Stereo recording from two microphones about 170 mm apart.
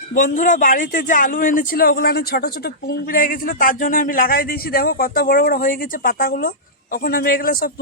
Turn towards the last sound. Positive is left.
turn(degrees=60)  # may be behind; listen again after turning